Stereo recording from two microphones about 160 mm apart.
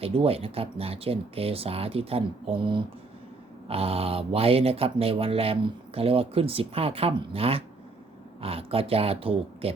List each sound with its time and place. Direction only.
0.0 s speech: 35° right (ahead or behind)